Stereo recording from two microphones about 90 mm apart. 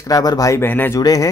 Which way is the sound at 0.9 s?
45° left (ahead or behind).